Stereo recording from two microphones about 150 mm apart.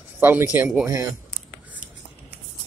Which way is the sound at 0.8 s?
20° right (ahead or behind).